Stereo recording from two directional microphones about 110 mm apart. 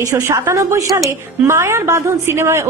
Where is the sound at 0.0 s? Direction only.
30° right (ahead or behind).